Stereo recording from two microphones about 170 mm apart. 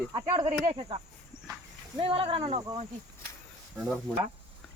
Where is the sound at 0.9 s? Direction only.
35° right (ahead or behind).